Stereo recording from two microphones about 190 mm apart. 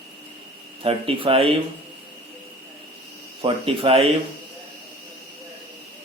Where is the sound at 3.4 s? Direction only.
30° right (ahead or behind).